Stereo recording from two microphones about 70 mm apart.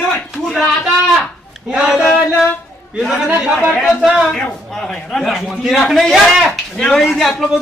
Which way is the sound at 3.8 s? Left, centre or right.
Centre.